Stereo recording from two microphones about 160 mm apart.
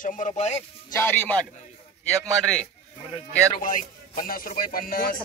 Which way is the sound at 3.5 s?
55° left (ahead or behind).